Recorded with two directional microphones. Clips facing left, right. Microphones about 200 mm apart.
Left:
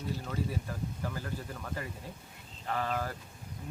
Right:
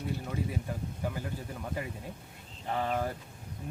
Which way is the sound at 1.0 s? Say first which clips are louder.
Right 4 dB; 15° right (ahead or behind).